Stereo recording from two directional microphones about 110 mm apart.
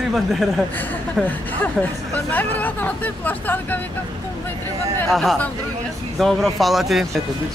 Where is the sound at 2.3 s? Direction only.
15° left (ahead or behind).